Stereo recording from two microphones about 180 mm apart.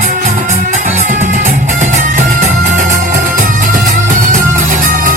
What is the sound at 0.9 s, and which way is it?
Music, 40° right (ahead or behind).